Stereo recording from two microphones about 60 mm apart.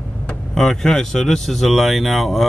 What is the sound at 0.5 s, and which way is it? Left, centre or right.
Speech, centre.